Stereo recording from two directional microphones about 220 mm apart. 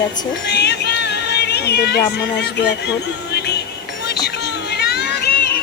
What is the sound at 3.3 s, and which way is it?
Music, 50° left (ahead or behind).